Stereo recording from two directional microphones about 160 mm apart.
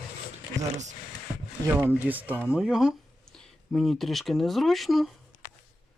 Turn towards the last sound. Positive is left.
turn(degrees=0)  # may be behind; listen again after turning